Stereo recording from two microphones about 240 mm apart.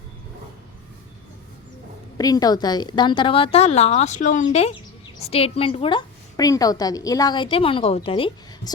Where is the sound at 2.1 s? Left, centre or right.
Centre.